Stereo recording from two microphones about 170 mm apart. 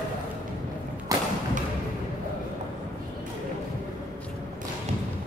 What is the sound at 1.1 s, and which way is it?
Thump, 20° right (ahead or behind).